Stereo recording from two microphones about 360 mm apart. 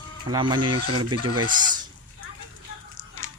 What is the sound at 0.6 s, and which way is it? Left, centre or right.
Speech, right.